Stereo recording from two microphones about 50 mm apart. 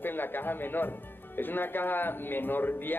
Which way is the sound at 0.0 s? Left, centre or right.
Left.